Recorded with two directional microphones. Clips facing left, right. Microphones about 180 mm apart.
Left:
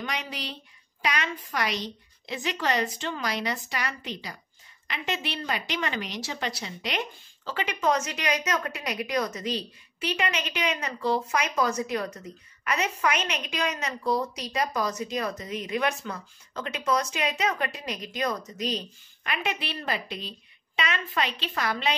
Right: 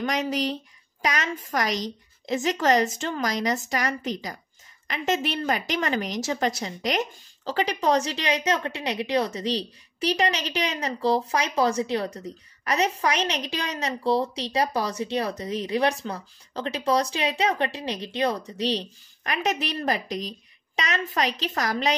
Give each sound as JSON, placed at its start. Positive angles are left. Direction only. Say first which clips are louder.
{"t": 0.0, "sound": "a woman's voice", "louder": "right 9 dB", "side_deg": -45}